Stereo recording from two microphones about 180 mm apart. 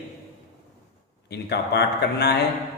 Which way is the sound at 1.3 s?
65° left (ahead or behind).